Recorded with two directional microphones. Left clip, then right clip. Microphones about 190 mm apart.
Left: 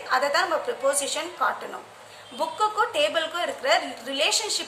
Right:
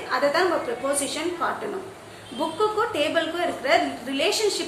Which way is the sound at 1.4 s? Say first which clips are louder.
Even; 40° left (ahead or behind).